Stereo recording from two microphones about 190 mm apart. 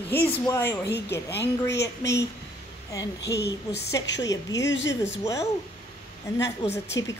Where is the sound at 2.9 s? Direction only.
15° left (ahead or behind).